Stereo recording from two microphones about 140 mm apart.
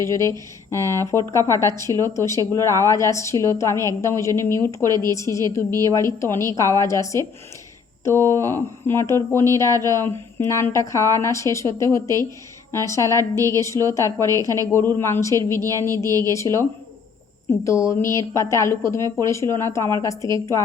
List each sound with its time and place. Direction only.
0.0 s a woman's voice: 20° left (ahead or behind)
0.9 s speech: 25° right (ahead or behind)
1.3 s a woman's voice: 20° left (ahead or behind)
9.6 s speech: 25° right (ahead or behind)
9.9 s a woman's voice: 20° left (ahead or behind)
13.1 s speech: 25° right (ahead or behind)
13.6 s a woman's voice: 20° left (ahead or behind)